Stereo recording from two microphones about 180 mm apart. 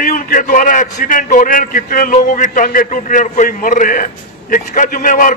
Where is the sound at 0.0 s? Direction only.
50° left (ahead or behind).